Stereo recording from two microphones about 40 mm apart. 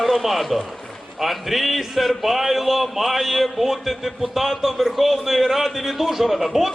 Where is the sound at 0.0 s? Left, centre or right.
Centre.